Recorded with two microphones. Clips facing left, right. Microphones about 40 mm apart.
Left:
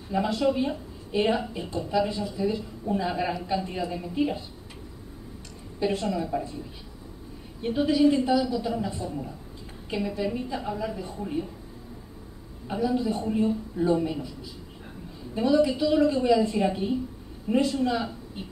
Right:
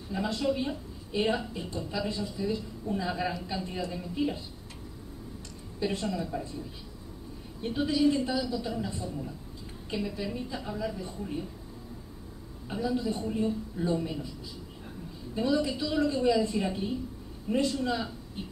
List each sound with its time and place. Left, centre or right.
0.4 s a man's voice: centre
5.8 s a woman's voice: left
7.8 s a woman's voice: left
12.6 s a man's voice: centre
15.3 s a man's voice: centre
17.6 s a woman's voice: left
17.8 s a man's voice: centre